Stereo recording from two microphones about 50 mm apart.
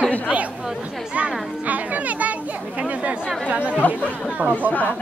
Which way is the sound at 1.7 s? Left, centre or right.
Right.